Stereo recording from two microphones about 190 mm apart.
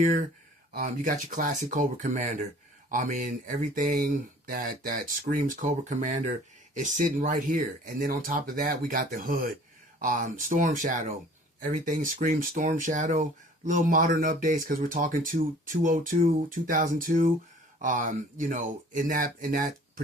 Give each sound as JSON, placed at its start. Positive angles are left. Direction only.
{"t": 0.0, "sound": "speech", "side_deg": -45}